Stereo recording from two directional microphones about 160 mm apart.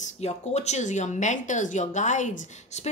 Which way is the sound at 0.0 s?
45° left (ahead or behind).